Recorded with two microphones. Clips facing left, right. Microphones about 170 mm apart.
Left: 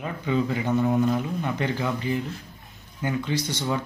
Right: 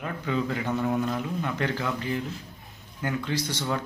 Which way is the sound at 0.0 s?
10° left (ahead or behind).